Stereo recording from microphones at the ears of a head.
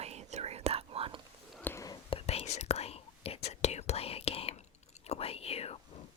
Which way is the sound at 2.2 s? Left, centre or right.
Left.